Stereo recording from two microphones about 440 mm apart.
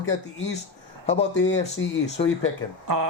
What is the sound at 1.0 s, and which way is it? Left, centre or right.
Speech, centre.